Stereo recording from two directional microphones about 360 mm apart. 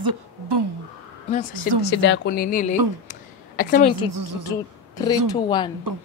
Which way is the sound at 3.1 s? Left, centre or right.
Left.